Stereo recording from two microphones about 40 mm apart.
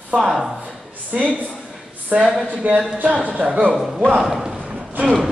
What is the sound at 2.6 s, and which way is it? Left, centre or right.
A man's voice, right.